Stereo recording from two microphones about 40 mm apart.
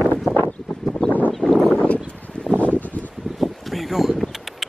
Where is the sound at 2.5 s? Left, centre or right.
Left.